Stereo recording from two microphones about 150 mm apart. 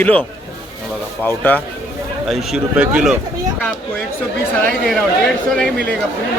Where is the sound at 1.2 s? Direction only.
10° left (ahead or behind).